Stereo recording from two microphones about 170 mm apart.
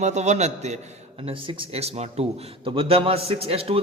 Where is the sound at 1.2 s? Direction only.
30° right (ahead or behind).